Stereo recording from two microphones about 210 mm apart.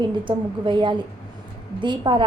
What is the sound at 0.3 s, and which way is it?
A woman's voice, 20° right (ahead or behind).